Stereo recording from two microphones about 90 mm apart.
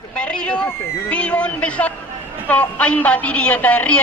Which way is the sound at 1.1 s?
15° left (ahead or behind).